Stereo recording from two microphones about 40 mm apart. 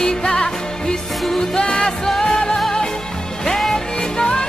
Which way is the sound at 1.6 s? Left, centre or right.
Left.